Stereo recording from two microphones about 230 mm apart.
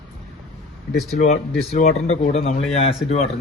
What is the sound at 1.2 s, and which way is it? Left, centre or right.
A man's voice, left.